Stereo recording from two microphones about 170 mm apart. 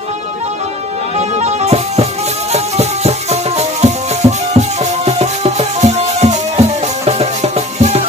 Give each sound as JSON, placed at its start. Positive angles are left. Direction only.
{"t": 1.4, "sound": "music", "side_deg": -40}